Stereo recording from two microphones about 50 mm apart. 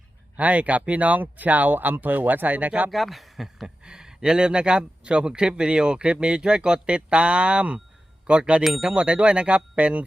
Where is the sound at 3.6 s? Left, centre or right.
Centre.